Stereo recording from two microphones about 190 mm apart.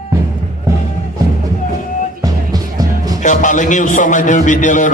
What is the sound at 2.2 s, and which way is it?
Music, 20° right (ahead or behind).